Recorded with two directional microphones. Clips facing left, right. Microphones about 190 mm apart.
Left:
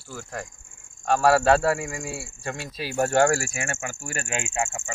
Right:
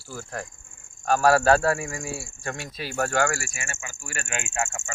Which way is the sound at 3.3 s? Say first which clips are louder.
Left 6 dB; 50° left (ahead or behind).